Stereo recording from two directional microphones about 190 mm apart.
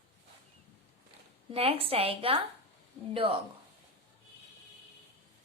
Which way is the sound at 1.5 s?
30° right (ahead or behind).